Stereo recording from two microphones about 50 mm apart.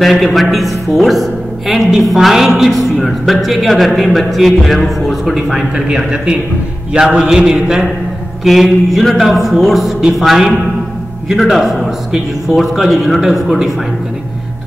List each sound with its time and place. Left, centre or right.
0.0 s a woman's voice: centre
5.9 s a sound: centre
8.5 s a woman's voice: centre